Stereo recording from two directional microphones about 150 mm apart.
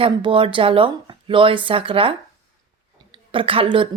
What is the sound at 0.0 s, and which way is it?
Speech, 35° right (ahead or behind).